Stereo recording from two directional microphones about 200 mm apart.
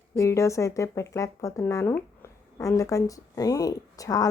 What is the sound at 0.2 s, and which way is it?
A woman's voice, 15° left (ahead or behind).